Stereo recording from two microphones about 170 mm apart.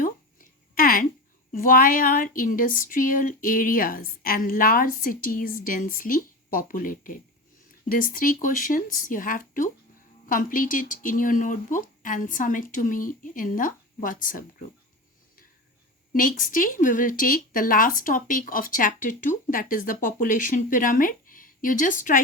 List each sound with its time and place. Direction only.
0.0 s a sound: 55° left (ahead or behind)
1.5 s speech: 55° left (ahead or behind)
16.1 s speech: 55° left (ahead or behind)